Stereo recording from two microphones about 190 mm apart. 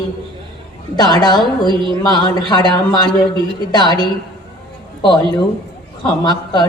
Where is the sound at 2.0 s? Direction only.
20° left (ahead or behind).